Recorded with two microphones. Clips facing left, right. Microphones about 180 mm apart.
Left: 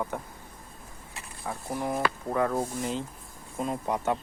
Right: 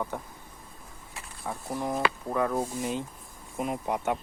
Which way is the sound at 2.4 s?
15° right (ahead or behind).